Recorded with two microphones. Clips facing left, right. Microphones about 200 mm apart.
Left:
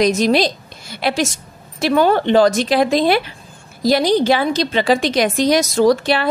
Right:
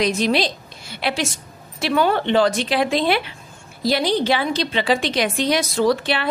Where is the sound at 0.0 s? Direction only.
45° left (ahead or behind).